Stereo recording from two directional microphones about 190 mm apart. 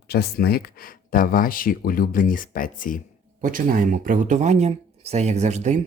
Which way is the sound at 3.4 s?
45° right (ahead or behind).